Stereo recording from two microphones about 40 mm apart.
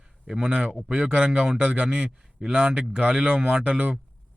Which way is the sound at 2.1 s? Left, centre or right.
Centre.